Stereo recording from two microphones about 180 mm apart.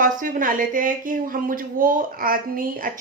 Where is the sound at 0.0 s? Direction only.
50° right (ahead or behind).